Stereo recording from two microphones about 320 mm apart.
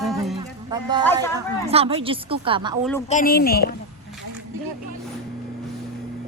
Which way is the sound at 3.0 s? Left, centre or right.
Left.